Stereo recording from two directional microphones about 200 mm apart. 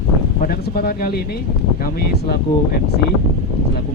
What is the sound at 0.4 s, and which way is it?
Speech, 50° left (ahead or behind).